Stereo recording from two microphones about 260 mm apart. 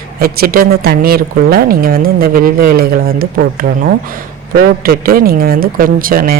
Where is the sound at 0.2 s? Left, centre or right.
Right.